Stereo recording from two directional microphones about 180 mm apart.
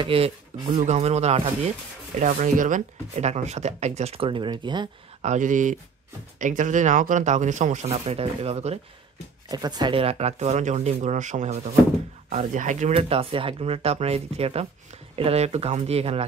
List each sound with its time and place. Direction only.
0.0 s speech: 30° right (ahead or behind)
5.2 s speech: 45° right (ahead or behind)
9.5 s speech: 20° right (ahead or behind)